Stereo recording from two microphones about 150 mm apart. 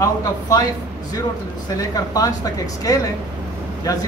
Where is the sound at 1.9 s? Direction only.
25° left (ahead or behind).